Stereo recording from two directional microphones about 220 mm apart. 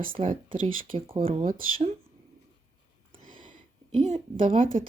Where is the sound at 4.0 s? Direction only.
30° right (ahead or behind).